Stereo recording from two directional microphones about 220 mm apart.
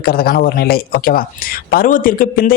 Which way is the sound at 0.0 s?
45° left (ahead or behind).